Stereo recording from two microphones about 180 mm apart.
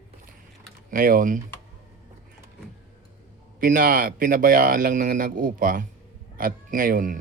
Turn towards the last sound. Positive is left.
turn(degrees=-50)  # may be behind; listen again after turning